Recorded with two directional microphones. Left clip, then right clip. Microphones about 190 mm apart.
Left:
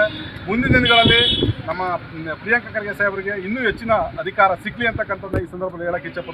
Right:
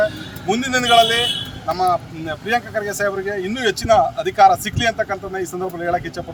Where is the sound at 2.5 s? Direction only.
30° right (ahead or behind).